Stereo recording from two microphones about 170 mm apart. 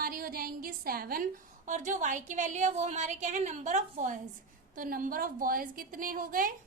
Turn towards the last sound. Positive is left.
turn(degrees=-55)  # may be behind; listen again after turning